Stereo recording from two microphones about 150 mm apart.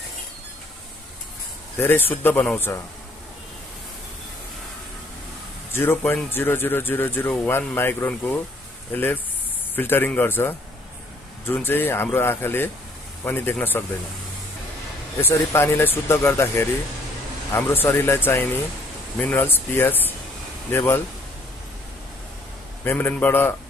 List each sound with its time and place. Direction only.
1.8 s speech: 15° left (ahead or behind)
5.7 s speech: 15° left (ahead or behind)
15.1 s speech: 15° left (ahead or behind)
22.8 s speech: 10° left (ahead or behind)